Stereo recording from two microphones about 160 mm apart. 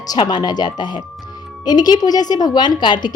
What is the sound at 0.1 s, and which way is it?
A woman's voice, 25° left (ahead or behind).